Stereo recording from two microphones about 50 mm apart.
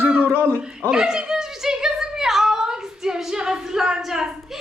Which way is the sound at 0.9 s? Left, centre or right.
Centre.